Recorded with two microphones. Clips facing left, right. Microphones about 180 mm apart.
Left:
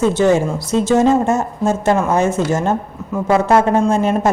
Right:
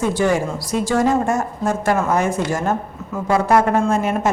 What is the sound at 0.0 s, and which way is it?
Speech, 20° left (ahead or behind).